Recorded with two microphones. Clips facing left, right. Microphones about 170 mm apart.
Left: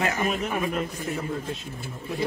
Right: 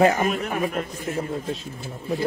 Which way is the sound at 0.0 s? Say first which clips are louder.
Right 8 dB; 35° right (ahead or behind).